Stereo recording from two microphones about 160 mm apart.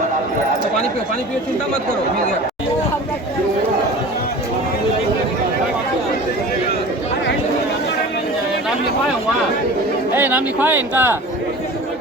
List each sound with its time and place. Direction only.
10.2 s speech: 10° right (ahead or behind)